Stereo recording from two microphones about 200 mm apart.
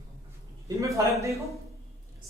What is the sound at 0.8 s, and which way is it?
Speech, 15° right (ahead or behind).